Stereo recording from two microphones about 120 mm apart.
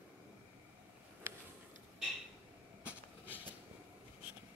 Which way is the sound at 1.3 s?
20° right (ahead or behind).